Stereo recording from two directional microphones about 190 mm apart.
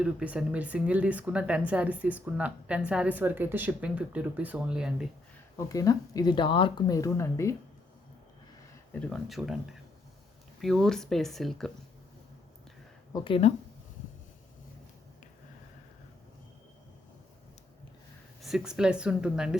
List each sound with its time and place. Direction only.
0.0 s speech: 5° right (ahead or behind)
5.5 s speech: 15° left (ahead or behind)
8.9 s speech: 5° left (ahead or behind)
13.1 s speech: 25° left (ahead or behind)
18.4 s speech: centre (ahead or behind)